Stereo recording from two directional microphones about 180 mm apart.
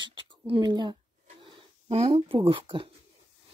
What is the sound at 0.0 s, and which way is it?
Speech, 30° right (ahead or behind).